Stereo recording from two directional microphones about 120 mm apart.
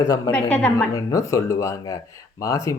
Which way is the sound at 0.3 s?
15° left (ahead or behind).